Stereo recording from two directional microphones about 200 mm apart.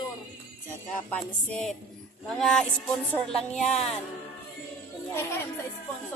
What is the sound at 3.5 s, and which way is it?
Music, 35° left (ahead or behind).